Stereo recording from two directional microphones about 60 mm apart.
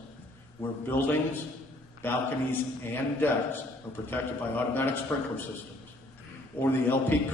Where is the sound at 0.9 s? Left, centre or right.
Left.